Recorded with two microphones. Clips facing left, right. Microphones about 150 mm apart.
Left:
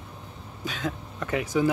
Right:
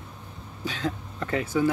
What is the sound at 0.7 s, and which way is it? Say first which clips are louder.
Speech: right 1 dB; 10° left (ahead or behind).